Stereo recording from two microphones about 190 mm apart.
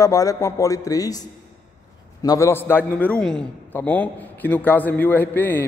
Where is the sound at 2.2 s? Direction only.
20° left (ahead or behind).